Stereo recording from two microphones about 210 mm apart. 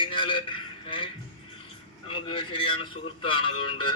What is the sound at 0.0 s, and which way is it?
A man's voice, 25° left (ahead or behind).